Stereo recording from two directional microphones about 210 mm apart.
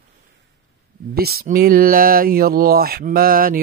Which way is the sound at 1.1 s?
45° right (ahead or behind).